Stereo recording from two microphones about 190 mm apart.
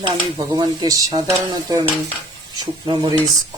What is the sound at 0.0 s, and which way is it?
Speech, 20° right (ahead or behind).